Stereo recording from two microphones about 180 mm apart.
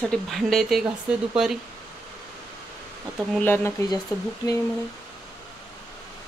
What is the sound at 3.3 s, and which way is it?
Speech, 10° left (ahead or behind).